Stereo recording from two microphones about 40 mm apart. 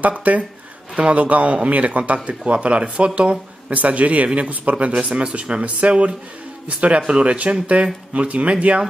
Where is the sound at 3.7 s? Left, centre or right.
Right.